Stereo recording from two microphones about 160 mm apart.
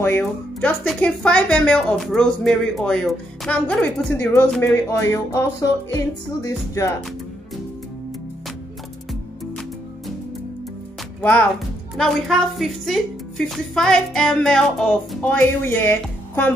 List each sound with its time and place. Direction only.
0.0 s speech: 15° left (ahead or behind)
4.8 s music: 20° left (ahead or behind)
11.1 s speech: 10° left (ahead or behind)